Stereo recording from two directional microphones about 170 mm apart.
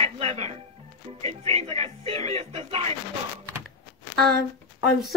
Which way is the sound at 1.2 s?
35° right (ahead or behind).